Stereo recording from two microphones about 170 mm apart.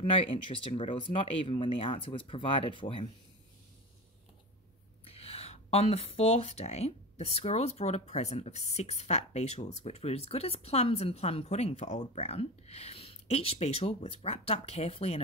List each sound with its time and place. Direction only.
0.0 s speech: 30° left (ahead or behind)
5.0 s speech: 35° left (ahead or behind)